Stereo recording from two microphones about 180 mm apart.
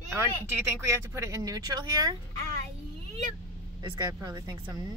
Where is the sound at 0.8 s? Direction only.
15° right (ahead or behind).